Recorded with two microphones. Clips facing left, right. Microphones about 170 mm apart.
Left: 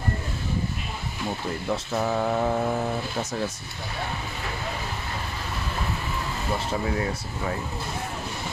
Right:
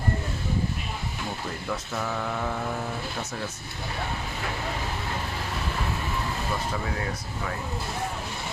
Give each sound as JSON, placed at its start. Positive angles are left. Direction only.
{"t": 1.7, "sound": "mantra", "side_deg": 35}